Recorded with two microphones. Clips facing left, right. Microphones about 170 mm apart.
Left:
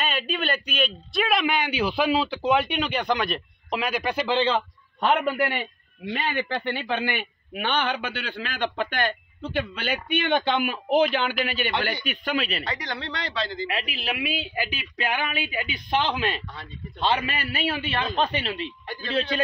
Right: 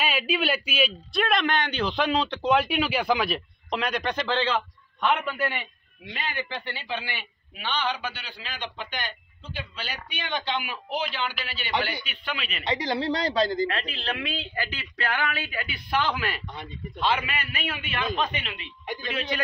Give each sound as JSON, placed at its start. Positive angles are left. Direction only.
{"t": 0.0, "sound": "a man's voice", "side_deg": -5}
{"t": 6.1, "sound": "a man's voice", "side_deg": 60}
{"t": 12.6, "sound": "a man's voice", "side_deg": -25}
{"t": 13.7, "sound": "a man's voice", "side_deg": 10}
{"t": 17.0, "sound": "a man's voice", "side_deg": 30}